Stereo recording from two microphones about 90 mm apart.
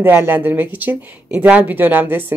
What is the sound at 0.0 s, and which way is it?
Speech, 20° right (ahead or behind).